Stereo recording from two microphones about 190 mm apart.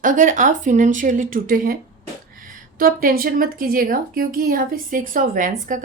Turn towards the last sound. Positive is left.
turn(degrees=-45)  # may be behind; listen again after turning